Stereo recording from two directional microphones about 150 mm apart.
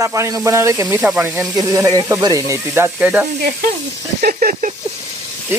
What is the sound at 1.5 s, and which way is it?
Speech, 20° right (ahead or behind).